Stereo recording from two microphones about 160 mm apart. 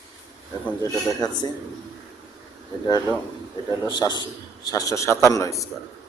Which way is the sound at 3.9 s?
25° left (ahead or behind).